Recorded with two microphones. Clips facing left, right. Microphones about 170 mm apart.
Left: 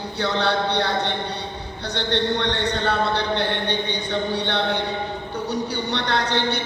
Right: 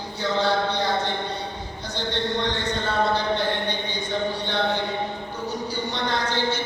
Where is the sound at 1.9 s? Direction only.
70° left (ahead or behind).